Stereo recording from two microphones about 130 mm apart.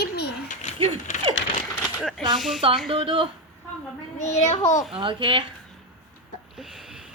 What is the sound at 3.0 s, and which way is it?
Speech, 40° right (ahead or behind).